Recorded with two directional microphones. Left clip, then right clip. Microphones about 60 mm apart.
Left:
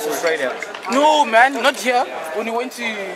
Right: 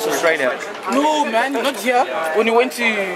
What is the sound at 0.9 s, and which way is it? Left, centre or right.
Speech, left.